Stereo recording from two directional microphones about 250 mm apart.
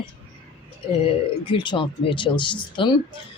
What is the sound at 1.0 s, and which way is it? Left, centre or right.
Speech, centre.